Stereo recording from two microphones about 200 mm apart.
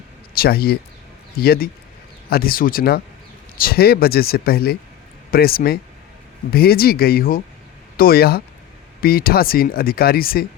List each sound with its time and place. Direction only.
0.3 s speech: 50° left (ahead or behind)